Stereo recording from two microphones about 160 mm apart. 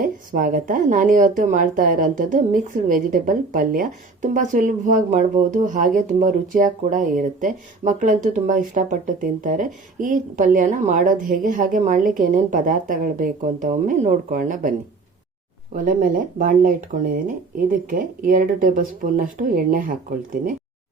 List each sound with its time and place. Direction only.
0.0 s a woman's voice: 60° right (ahead or behind)
15.7 s a woman's voice: 55° right (ahead or behind)